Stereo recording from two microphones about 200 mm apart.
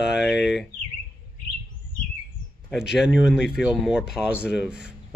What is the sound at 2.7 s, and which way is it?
Speech, centre (ahead or behind).